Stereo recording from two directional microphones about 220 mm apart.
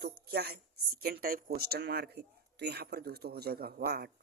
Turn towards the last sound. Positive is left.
turn(degrees=-45)  # may be behind; listen again after turning